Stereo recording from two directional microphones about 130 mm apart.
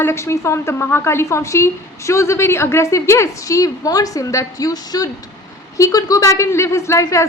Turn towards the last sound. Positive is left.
turn(degrees=25)  # may be behind; listen again after turning